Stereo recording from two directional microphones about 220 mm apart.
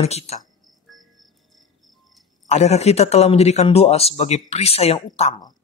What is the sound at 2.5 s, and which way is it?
Speech, 30° left (ahead or behind).